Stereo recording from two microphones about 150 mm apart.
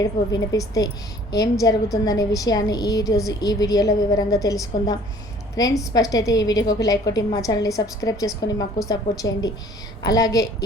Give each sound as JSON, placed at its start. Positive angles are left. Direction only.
{"t": 0.0, "sound": "a woman's voice", "side_deg": 25}